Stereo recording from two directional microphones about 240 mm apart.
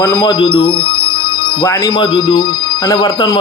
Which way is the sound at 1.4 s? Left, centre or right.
Left.